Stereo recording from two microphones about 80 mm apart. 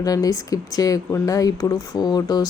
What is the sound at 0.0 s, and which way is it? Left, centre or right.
Speech, left.